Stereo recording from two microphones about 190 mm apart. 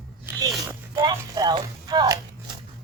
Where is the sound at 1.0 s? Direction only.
20° right (ahead or behind).